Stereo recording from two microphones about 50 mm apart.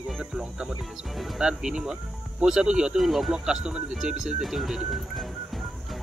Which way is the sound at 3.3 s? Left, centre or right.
Centre.